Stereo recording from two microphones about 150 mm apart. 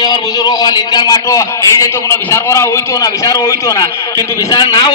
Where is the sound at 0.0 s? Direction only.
25° left (ahead or behind).